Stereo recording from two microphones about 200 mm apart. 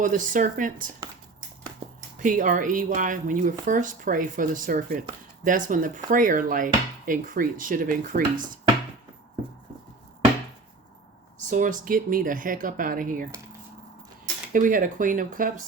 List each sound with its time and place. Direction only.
0.0 s speech: 40° right (ahead or behind)
1.8 s a sound: 25° right (ahead or behind)
2.1 s speech: 40° right (ahead or behind)
11.4 s speech: 40° right (ahead or behind)
14.5 s speech: 40° right (ahead or behind)